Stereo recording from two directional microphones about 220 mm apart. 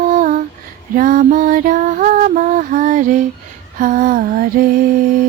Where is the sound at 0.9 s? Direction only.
35° right (ahead or behind).